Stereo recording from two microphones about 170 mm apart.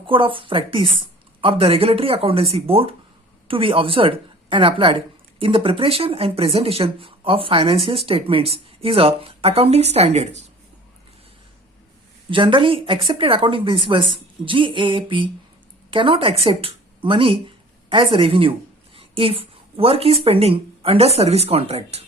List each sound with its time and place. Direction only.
0.0 s a woman's voice: 30° right (ahead or behind)
12.3 s a woman's voice: 30° right (ahead or behind)